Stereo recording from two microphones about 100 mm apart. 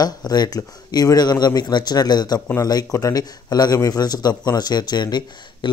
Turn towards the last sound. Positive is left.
turn(degrees=45)  # may be behind; listen again after turning